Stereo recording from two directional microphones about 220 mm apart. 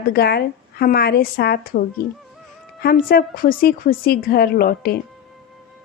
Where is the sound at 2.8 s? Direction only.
40° left (ahead or behind).